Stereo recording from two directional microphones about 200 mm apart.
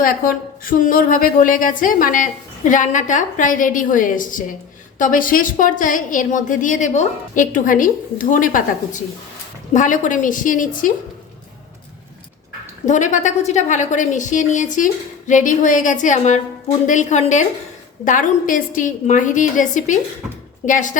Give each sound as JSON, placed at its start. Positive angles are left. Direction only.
{"t": 0.0, "sound": "a woman's voice", "side_deg": 45}
{"t": 12.8, "sound": "a woman's voice", "side_deg": 40}